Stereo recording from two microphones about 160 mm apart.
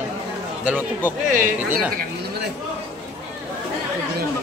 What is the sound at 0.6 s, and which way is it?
Speech, 10° right (ahead or behind).